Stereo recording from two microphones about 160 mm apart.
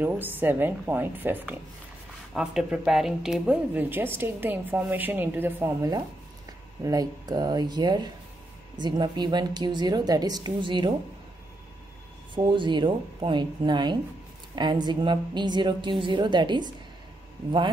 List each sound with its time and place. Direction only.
0.0 s a woman's voice: 10° right (ahead or behind); by 10.9 s 30° right (ahead or behind)
12.4 s a woman's voice: 30° right (ahead or behind)